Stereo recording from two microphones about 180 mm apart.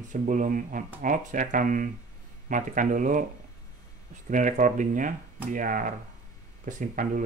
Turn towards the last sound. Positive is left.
turn(degrees=-50)  # may be behind; listen again after turning